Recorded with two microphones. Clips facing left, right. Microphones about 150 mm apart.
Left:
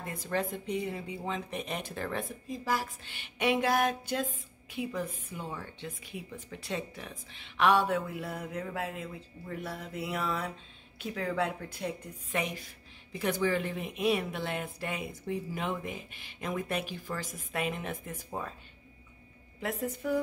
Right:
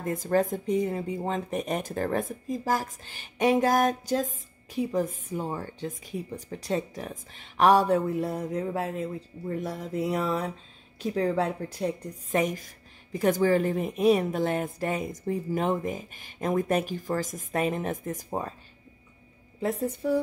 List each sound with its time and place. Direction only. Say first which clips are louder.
0.0 s speech: right 8 dB; 45° right (ahead or behind)
19.6 s speech: right 6 dB; 35° right (ahead or behind)